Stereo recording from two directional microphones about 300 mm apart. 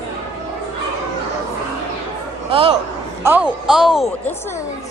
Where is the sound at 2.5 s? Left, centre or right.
Centre.